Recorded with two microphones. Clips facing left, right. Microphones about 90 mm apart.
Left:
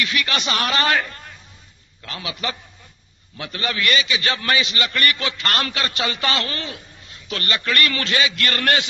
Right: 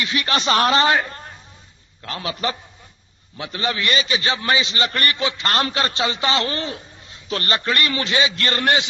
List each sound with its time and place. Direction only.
0.0 s a man's voice: 30° right (ahead or behind)
3.3 s a man's voice: 25° right (ahead or behind)
4.2 s a man's voice: 25° right (ahead or behind)
5.1 s a man's voice: 20° right (ahead or behind)